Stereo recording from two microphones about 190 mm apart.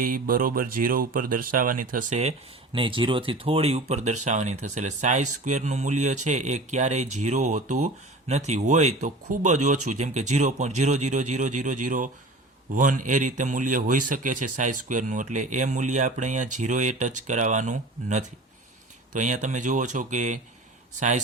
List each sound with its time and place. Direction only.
0.0 s speech: 50° right (ahead or behind)
2.7 s speech: 25° right (ahead or behind)